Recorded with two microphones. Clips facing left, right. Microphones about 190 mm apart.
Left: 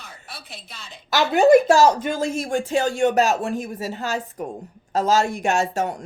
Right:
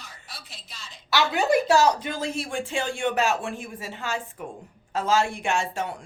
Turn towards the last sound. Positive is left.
turn(degrees=40)  # may be behind; listen again after turning